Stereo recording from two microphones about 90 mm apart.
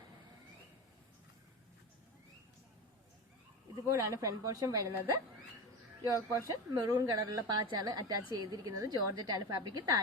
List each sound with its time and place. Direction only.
3.8 s a woman's voice: 35° right (ahead or behind)